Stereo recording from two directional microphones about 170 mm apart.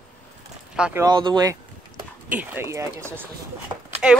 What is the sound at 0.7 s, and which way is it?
Speech, 5° right (ahead or behind).